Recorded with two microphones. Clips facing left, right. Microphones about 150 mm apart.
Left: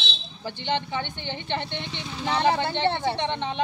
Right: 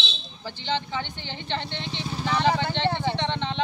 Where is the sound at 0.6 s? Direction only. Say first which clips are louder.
Left 1 dB; 15° left (ahead or behind).